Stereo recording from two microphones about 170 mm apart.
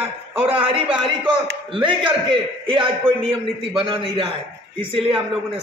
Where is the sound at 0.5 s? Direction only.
30° right (ahead or behind).